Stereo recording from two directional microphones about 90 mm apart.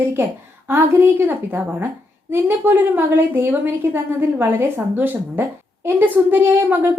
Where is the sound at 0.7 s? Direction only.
25° right (ahead or behind).